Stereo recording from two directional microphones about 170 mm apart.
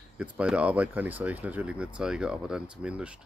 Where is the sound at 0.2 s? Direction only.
5° right (ahead or behind).